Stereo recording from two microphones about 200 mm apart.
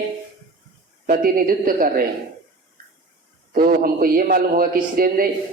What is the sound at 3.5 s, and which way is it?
A woman's voice, 45° right (ahead or behind).